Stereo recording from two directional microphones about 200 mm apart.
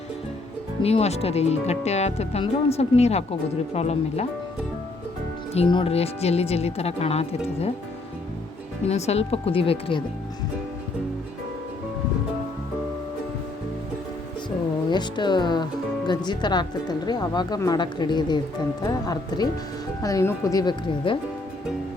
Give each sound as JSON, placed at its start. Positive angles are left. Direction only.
{"t": 0.8, "sound": "speech", "side_deg": 30}
{"t": 5.5, "sound": "speech", "side_deg": 25}
{"t": 8.9, "sound": "speech", "side_deg": 30}
{"t": 14.8, "sound": "speech", "side_deg": 20}